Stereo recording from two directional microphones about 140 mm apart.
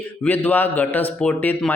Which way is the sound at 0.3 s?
15° left (ahead or behind).